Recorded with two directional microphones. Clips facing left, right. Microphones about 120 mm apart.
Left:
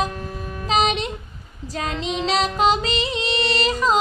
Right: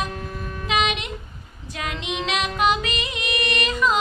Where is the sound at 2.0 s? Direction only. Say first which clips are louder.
Left 4 dB; 35° left (ahead or behind).